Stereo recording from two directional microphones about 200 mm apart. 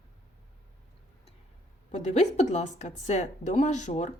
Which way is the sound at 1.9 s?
35° left (ahead or behind).